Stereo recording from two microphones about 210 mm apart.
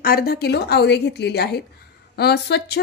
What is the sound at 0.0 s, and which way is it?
A woman's voice, 45° left (ahead or behind).